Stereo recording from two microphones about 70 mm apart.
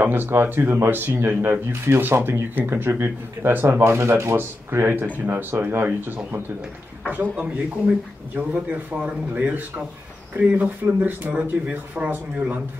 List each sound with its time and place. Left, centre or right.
0.0 s speech: right
5.0 s speech: right
5.3 s speech: right